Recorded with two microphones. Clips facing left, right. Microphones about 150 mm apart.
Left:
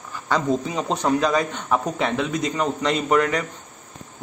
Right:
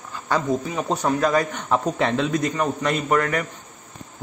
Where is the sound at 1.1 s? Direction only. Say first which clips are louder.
Even; 20° left (ahead or behind).